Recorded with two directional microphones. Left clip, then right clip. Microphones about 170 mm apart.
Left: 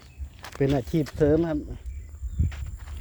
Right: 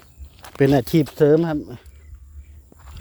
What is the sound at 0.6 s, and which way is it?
Speech, 70° right (ahead or behind).